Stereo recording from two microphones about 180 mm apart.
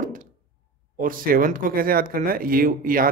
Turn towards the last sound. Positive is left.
turn(degrees=-50)  # may be behind; listen again after turning